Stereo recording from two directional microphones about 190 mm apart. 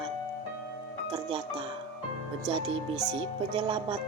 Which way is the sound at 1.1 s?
25° right (ahead or behind).